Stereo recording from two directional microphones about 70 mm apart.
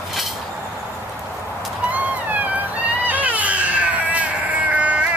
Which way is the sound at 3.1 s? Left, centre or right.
Right.